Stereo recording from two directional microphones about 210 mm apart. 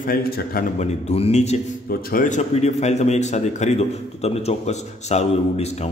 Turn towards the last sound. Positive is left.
turn(degrees=30)  # may be behind; listen again after turning